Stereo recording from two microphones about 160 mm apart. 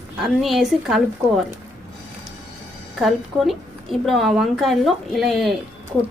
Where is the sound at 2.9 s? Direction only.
Centre (ahead or behind).